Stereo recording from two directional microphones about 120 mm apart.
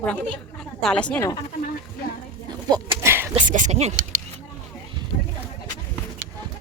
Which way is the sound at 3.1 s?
20° right (ahead or behind).